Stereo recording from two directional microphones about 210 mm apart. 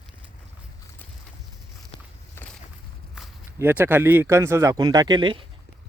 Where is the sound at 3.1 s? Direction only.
Centre (ahead or behind).